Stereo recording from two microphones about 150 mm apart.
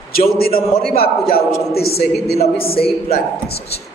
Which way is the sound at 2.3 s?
40° left (ahead or behind).